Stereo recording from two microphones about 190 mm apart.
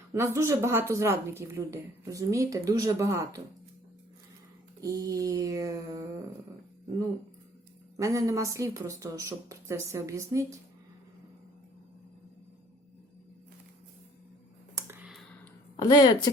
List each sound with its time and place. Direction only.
0.1 s a woman's voice: 15° right (ahead or behind)
4.8 s a woman's voice: 15° right (ahead or behind)
7.9 s a woman's voice: 15° right (ahead or behind)
14.8 s computer keyboard: 10° right (ahead or behind)
15.8 s speech: 20° left (ahead or behind)